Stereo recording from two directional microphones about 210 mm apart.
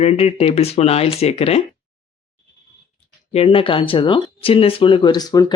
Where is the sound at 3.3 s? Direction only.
30° left (ahead or behind).